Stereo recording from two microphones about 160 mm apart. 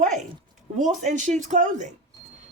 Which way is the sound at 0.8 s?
50° right (ahead or behind).